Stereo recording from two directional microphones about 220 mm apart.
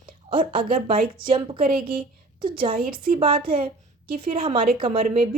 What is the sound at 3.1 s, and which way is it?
A woman's voice, 25° right (ahead or behind).